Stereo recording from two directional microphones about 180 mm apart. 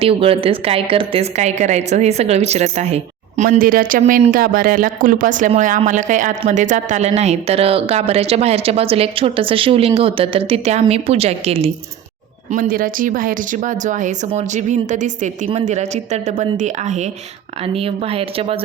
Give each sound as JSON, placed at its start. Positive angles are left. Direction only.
{"t": 0.0, "sound": "a woman's voice", "side_deg": -30}
{"t": 12.5, "sound": "a woman's voice", "side_deg": -50}